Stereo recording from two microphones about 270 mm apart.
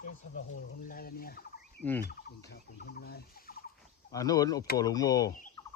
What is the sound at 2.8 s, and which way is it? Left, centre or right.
Fowl, left.